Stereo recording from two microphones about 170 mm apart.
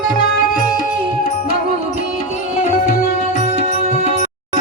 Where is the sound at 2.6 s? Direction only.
55° left (ahead or behind).